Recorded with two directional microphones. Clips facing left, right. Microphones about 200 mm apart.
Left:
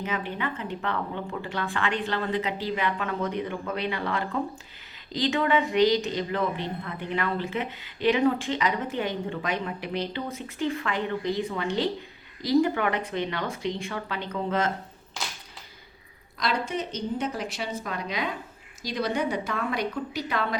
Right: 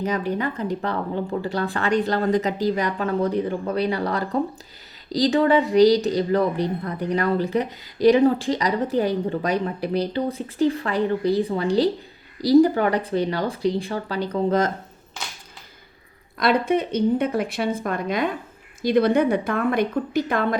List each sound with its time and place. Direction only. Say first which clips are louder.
0.0 s speech: right 7 dB; 40° right (ahead or behind)
16.4 s a woman's voice: right 9 dB; 60° right (ahead or behind)